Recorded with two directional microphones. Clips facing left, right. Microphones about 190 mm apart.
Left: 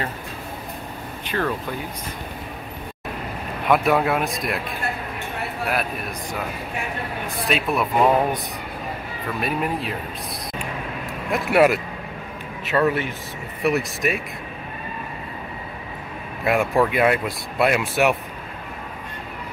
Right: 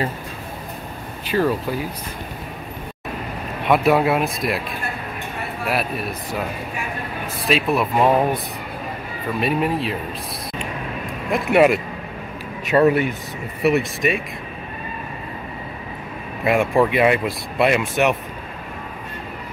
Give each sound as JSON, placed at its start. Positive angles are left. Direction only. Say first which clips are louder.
{"t": 1.2, "sound": "speech", "louder": "right 5 dB", "side_deg": -10}
{"t": 3.6, "sound": "speech", "louder": "right 2 dB", "side_deg": 0}
{"t": 7.4, "sound": "speech", "louder": "right 4 dB", "side_deg": 0}
{"t": 9.4, "sound": "speech", "louder": "right 4 dB", "side_deg": 0}
{"t": 11.3, "sound": "speech", "louder": "right 2 dB", "side_deg": 0}
{"t": 12.6, "sound": "speech", "louder": "right 5 dB", "side_deg": -20}
{"t": 13.6, "sound": "speech", "louder": "right 3 dB", "side_deg": 0}
{"t": 16.4, "sound": "speech", "louder": "right 2 dB", "side_deg": 0}